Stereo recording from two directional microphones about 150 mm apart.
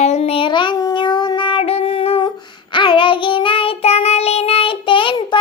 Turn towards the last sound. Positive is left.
turn(degrees=35)  # may be behind; listen again after turning